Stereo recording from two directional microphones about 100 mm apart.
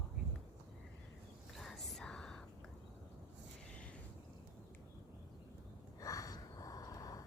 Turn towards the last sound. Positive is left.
turn(degrees=40)  # may be behind; listen again after turning